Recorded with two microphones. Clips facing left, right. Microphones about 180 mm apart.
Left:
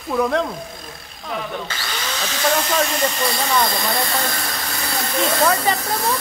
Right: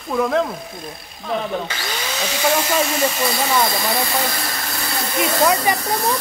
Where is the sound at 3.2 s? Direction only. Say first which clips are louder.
Right 1 dB; 5° right (ahead or behind).